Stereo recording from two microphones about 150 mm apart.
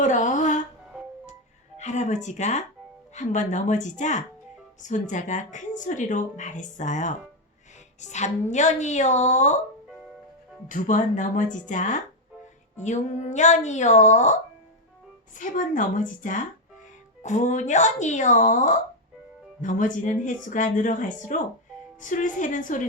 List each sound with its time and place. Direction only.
0.0 s music: 55° left (ahead or behind)
1.8 s a woman's voice: 50° left (ahead or behind)
10.7 s a woman's voice: 60° left (ahead or behind)
15.4 s a woman's voice: 60° left (ahead or behind)